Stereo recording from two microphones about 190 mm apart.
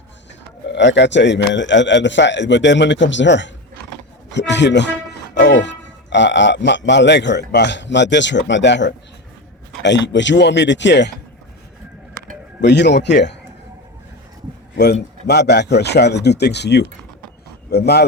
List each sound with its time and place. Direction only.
0.7 s a man's voice: 65° left (ahead or behind)
12.5 s speech: 65° left (ahead or behind)
15.3 s speech: 60° left (ahead or behind)